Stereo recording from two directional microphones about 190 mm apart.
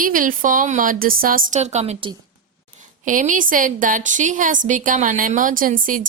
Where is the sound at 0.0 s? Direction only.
45° right (ahead or behind).